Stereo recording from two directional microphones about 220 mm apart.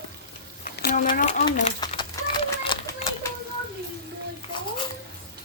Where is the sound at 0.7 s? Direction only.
40° left (ahead or behind).